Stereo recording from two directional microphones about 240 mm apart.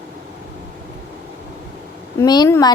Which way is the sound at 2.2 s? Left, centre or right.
Centre.